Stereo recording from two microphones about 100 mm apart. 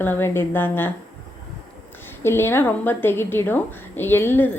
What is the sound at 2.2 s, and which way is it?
A woman's voice, 25° left (ahead or behind).